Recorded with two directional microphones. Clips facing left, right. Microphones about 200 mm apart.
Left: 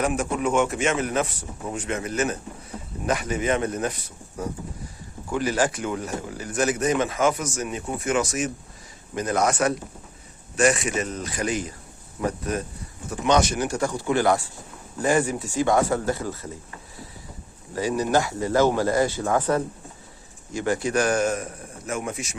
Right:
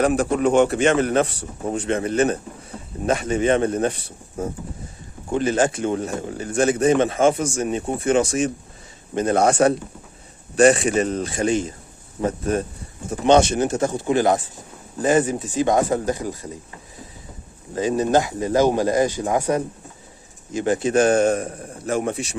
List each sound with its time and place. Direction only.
0.0 s speech: 35° right (ahead or behind); by 16.6 s 15° right (ahead or behind)
17.7 s speech: 25° right (ahead or behind)